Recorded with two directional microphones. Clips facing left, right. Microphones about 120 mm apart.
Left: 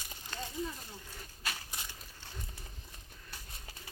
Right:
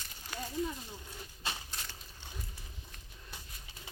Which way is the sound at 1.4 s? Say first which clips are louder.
Right 1 dB; 25° right (ahead or behind).